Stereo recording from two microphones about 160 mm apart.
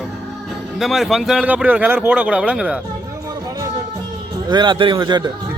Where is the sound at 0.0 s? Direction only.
Centre (ahead or behind).